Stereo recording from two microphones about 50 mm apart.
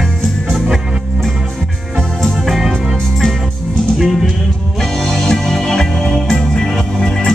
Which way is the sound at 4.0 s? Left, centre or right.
Centre.